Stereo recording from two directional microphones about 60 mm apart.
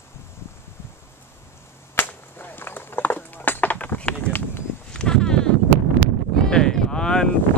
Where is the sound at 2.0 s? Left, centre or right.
Left.